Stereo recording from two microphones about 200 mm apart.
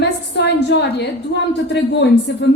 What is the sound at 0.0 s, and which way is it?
A woman's voice, 60° left (ahead or behind).